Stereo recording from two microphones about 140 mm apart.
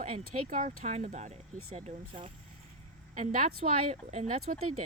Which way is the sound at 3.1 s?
60° right (ahead or behind).